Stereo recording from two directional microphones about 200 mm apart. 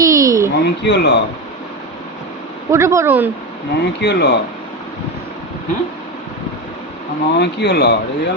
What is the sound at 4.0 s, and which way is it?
Speech, 60° left (ahead or behind).